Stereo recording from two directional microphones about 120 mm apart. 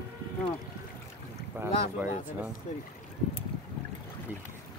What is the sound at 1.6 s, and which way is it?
Speech, 15° right (ahead or behind).